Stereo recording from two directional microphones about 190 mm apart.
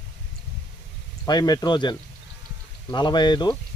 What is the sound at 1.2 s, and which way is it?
Speech, 20° left (ahead or behind).